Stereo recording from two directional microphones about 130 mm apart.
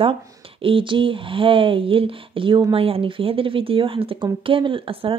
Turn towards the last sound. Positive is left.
turn(degrees=-45)  # may be behind; listen again after turning